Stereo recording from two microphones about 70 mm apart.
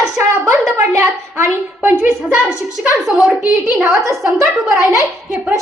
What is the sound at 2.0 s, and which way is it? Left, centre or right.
Speech, centre.